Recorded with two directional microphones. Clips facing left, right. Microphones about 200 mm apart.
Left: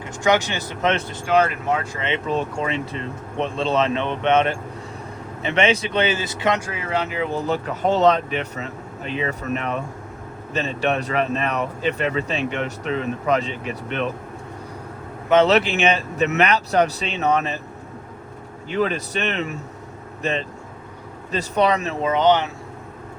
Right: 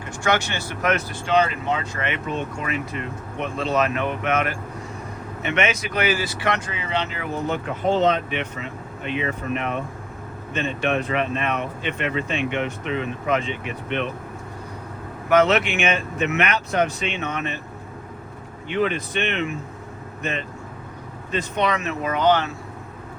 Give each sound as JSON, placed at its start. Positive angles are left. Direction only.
{"t": 0.2, "sound": "speech", "side_deg": 15}
{"t": 1.2, "sound": "speech", "side_deg": 5}
{"t": 2.0, "sound": "speech", "side_deg": 25}
{"t": 6.7, "sound": "speech", "side_deg": 5}
{"t": 7.3, "sound": "speech", "side_deg": 35}
{"t": 10.5, "sound": "speech", "side_deg": 35}
{"t": 15.3, "sound": "speech", "side_deg": 30}
{"t": 18.7, "sound": "speech", "side_deg": 40}
{"t": 21.3, "sound": "speech", "side_deg": 35}